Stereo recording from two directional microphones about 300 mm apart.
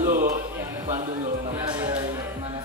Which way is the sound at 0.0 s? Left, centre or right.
Right.